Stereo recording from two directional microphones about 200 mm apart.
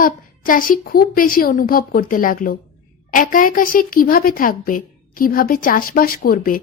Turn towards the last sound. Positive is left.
turn(degrees=45)  # may be behind; listen again after turning